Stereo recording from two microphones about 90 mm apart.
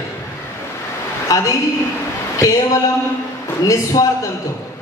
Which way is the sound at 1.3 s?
40° left (ahead or behind).